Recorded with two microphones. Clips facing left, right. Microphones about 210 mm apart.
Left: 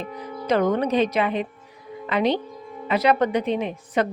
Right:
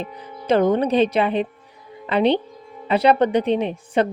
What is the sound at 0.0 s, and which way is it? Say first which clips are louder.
Speech: left 1 dB; 30° right (ahead or behind).